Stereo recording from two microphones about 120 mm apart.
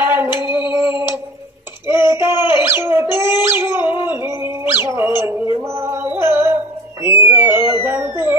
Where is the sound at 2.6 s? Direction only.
20° right (ahead or behind).